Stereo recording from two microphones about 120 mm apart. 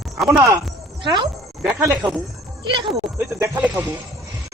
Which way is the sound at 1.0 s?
40° right (ahead or behind).